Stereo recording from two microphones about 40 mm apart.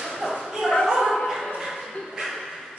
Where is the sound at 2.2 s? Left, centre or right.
Right.